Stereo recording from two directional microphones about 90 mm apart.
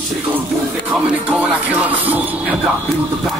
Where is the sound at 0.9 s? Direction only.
15° right (ahead or behind).